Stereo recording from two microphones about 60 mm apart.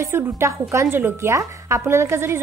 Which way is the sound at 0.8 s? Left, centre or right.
Right.